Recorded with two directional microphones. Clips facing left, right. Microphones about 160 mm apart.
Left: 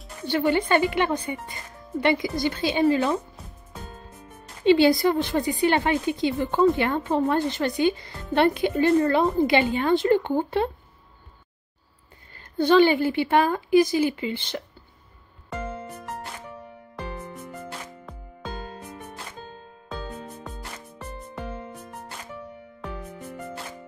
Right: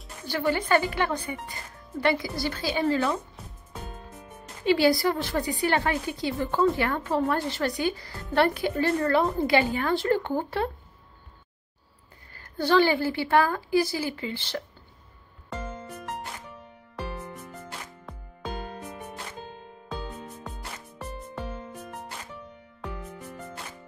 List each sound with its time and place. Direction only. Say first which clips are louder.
0.3 s a woman's voice: left 3 dB; 20° left (ahead or behind)
4.6 s a woman's voice: left 4 dB; 25° left (ahead or behind)
12.4 s a woman's voice: left 4 dB; 20° left (ahead or behind)